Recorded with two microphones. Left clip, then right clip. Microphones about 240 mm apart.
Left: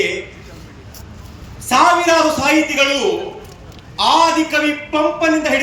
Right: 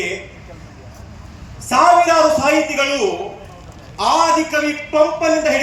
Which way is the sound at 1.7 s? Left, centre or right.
Left.